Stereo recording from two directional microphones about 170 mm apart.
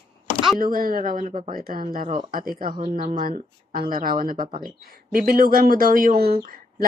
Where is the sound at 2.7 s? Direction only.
35° right (ahead or behind).